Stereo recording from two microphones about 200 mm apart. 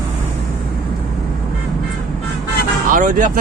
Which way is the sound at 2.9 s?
40° right (ahead or behind).